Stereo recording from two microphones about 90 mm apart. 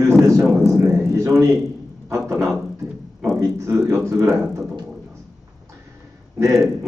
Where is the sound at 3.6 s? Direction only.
30° right (ahead or behind).